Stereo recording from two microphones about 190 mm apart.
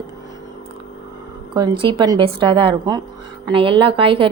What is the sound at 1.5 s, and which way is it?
A woman's voice, 25° right (ahead or behind).